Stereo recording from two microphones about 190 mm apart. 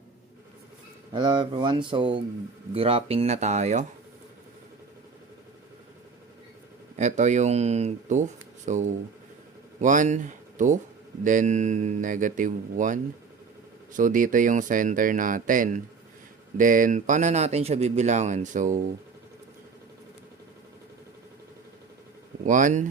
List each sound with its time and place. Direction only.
1.1 s a man's voice: 25° right (ahead or behind)
6.9 s a man's voice: 40° right (ahead or behind)
22.4 s speech: 40° right (ahead or behind)